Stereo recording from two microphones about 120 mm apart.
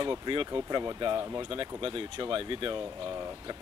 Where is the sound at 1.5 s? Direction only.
45° right (ahead or behind).